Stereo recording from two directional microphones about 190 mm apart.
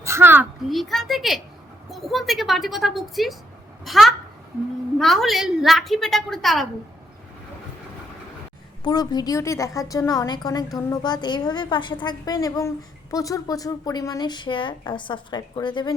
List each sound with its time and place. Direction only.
0.0 s a sound: 15° right (ahead or behind)
0.7 s a woman's voice: centre (ahead or behind)
8.8 s a woman's voice: 20° left (ahead or behind)